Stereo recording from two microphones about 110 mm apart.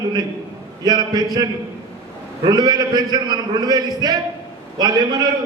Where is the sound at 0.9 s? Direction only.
40° right (ahead or behind).